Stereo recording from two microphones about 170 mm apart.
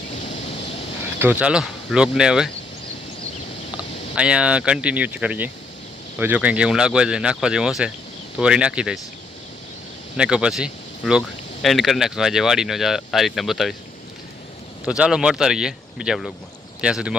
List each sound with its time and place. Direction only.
0.3 s a sound: 35° left (ahead or behind)
1.0 s speech: 10° right (ahead or behind)
4.1 s speech: 5° right (ahead or behind)
10.2 s speech: 5° right (ahead or behind)
14.8 s speech: 5° right (ahead or behind)